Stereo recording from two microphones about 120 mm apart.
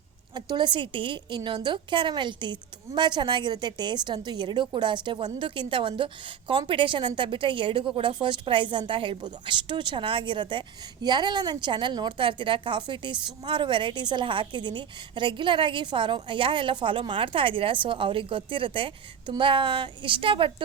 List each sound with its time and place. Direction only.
0.3 s a woman's voice: 40° right (ahead or behind)